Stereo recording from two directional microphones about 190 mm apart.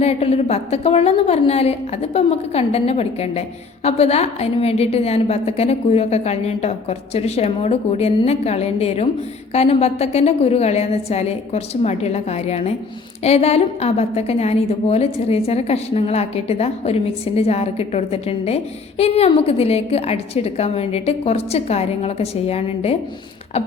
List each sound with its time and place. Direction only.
0.0 s a woman's voice: 35° left (ahead or behind)